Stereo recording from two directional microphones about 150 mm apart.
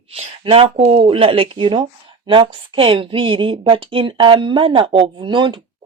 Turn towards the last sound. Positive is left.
turn(degrees=-30)  # may be behind; listen again after turning